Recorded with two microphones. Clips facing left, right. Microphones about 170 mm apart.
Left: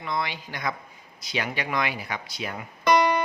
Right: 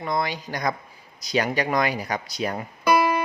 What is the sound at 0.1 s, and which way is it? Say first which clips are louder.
Speech: right 4 dB; 40° right (ahead or behind).